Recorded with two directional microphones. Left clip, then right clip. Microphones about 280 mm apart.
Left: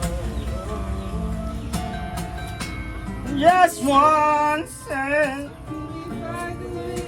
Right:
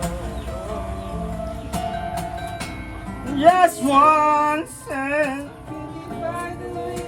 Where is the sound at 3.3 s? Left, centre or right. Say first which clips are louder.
Right 1 dB; right.